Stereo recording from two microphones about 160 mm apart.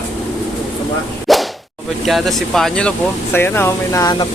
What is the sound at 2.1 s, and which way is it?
Speech, centre (ahead or behind).